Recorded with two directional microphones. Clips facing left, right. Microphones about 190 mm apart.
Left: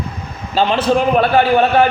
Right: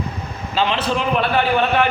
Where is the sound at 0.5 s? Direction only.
45° left (ahead or behind).